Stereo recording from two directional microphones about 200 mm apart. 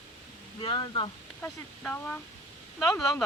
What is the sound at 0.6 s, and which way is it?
Speech, 25° left (ahead or behind).